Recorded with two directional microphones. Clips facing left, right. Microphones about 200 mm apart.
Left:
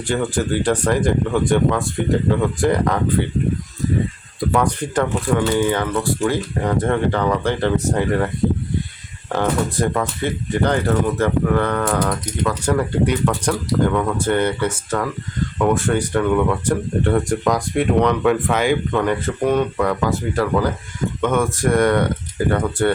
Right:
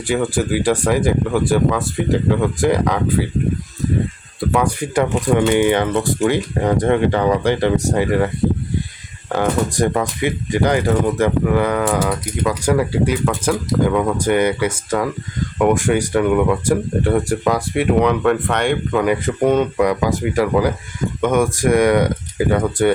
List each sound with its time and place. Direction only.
0.1 s speech: 10° right (ahead or behind)
4.4 s speech: 5° right (ahead or behind)
9.4 s speech: 15° right (ahead or behind)
19.4 s speech: 20° right (ahead or behind)